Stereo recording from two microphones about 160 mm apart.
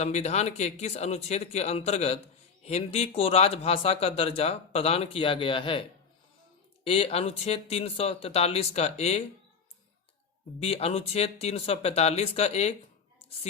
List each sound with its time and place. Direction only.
0.0 s speech: 45° left (ahead or behind)
6.8 s speech: 35° left (ahead or behind)
10.6 s speech: 35° left (ahead or behind)